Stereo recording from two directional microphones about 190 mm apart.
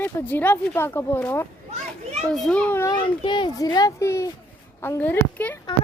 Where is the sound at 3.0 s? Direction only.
25° left (ahead or behind); by 5.5 s 10° left (ahead or behind).